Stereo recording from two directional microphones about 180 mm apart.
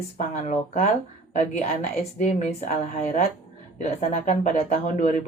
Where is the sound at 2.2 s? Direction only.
40° left (ahead or behind).